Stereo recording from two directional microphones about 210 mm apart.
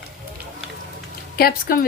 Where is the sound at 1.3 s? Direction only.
45° left (ahead or behind).